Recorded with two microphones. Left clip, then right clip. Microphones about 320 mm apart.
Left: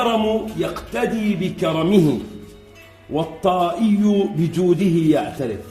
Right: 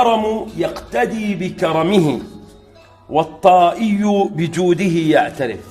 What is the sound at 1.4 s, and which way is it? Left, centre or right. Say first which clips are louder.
Speech: right 5 dB; centre.